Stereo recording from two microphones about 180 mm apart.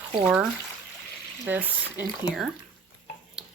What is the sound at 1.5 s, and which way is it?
Speech, 10° right (ahead or behind).